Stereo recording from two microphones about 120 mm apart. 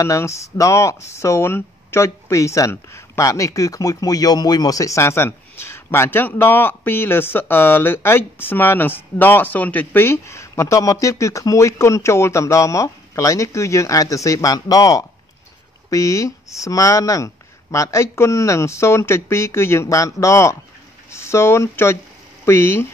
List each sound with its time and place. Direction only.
0.0 s speech: 25° left (ahead or behind)